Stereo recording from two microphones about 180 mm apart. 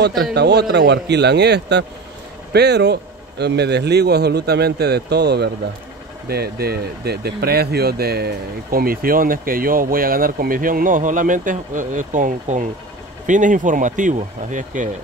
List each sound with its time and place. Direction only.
0.2 s speech: 65° right (ahead or behind); by 14.9 s 45° right (ahead or behind)